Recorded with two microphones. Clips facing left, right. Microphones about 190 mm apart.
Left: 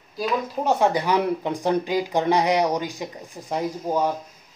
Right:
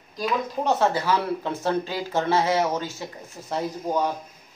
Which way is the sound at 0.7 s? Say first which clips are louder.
Left 2 dB; 15° left (ahead or behind).